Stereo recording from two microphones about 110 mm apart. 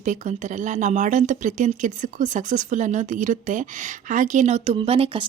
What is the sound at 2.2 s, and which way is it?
Speech, 90° right.